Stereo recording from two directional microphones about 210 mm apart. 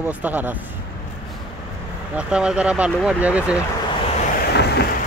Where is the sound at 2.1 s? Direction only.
5° right (ahead or behind).